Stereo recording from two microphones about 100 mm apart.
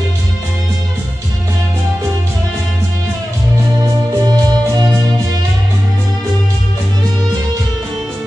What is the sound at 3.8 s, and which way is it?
Music, 40° right (ahead or behind).